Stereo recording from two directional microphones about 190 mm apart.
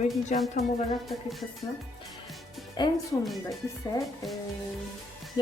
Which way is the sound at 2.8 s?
25° left (ahead or behind).